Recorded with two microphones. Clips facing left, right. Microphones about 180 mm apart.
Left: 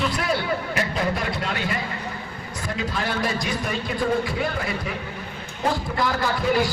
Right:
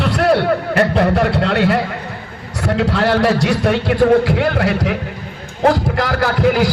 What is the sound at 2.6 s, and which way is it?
A man's voice, 70° right (ahead or behind).